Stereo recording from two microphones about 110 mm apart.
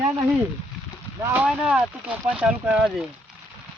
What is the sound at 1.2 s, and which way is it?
Speech, 20° right (ahead or behind).